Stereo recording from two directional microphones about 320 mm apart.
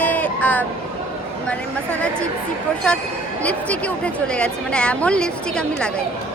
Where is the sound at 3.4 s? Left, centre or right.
Centre.